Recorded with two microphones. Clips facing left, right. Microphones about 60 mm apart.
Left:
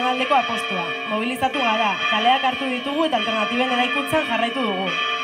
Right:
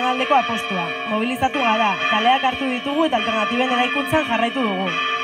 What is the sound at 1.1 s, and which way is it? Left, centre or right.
Speech, centre.